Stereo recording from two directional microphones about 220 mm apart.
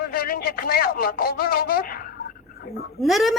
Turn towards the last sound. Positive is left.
turn(degrees=0)  # may be behind; listen again after turning